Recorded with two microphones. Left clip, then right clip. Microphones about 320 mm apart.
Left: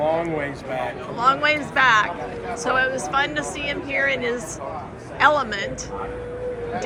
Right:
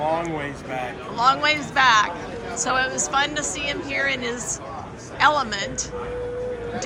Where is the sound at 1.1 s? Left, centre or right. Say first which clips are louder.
Even; centre.